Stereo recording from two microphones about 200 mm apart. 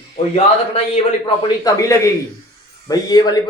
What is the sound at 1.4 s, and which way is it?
A man's voice, 15° left (ahead or behind).